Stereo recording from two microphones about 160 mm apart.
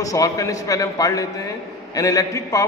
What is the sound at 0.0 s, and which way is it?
A man's voice, 20° left (ahead or behind).